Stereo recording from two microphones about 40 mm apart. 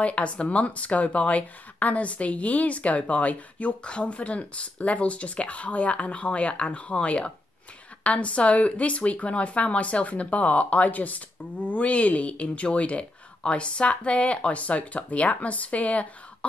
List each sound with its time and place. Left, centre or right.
0.0 s speech: left